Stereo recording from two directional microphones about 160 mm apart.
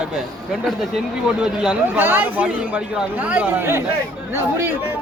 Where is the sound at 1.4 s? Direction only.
10° right (ahead or behind).